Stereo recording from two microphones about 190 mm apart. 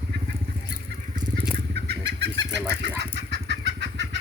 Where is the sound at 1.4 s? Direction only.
65° right (ahead or behind).